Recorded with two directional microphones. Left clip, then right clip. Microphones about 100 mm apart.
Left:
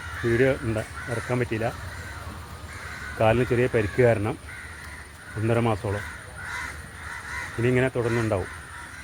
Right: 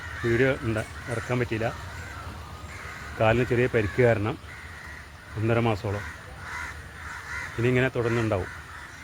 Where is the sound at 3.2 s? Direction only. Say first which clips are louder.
Left 1 dB; 15° right (ahead or behind).